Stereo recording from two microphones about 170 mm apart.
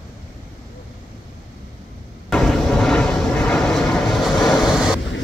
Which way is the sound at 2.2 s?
Centre (ahead or behind).